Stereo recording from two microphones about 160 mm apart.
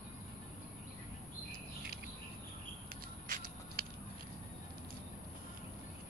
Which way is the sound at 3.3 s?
65° right (ahead or behind).